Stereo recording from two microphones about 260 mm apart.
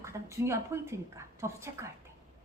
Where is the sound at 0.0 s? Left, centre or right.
Centre.